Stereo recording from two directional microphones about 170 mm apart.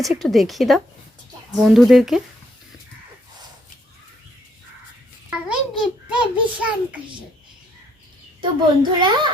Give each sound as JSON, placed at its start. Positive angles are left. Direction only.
{"t": 0.0, "sound": "a woman's voice", "side_deg": 0}
{"t": 5.3, "sound": "a sound", "side_deg": -5}
{"t": 8.4, "sound": "a woman's voice", "side_deg": -30}